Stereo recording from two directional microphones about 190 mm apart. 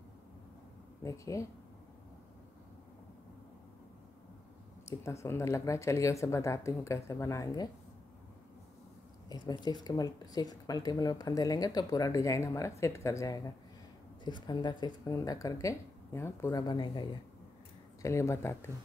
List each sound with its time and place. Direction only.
1.0 s speech: 15° left (ahead or behind)
4.8 s speech: 15° left (ahead or behind)
9.3 s a sound: 20° left (ahead or behind)
9.8 s speech: 20° left (ahead or behind)